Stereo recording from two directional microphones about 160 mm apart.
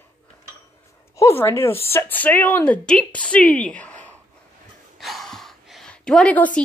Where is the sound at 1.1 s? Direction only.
15° left (ahead or behind).